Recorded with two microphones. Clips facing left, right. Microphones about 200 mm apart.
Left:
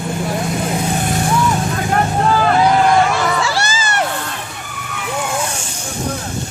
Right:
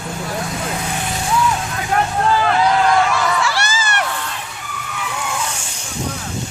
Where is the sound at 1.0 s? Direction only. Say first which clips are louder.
Left 5 dB; 50° left (ahead or behind).